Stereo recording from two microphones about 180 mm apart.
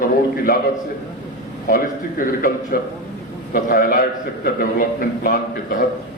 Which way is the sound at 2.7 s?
55° left (ahead or behind).